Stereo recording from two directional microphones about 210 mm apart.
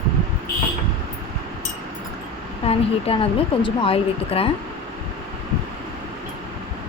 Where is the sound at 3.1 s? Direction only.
25° left (ahead or behind).